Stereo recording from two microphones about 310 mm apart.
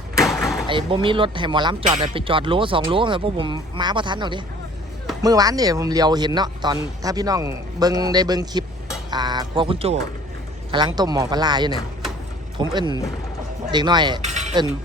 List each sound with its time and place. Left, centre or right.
0.2 s door: centre
0.7 s speech: centre